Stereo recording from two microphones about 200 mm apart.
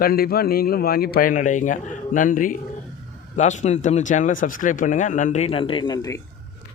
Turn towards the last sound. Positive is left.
turn(degrees=20)  # may be behind; listen again after turning